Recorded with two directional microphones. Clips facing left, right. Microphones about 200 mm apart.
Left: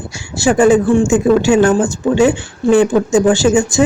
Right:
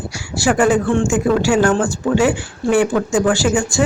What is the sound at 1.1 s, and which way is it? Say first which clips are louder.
Speech: left 4 dB; 20° left (ahead or behind).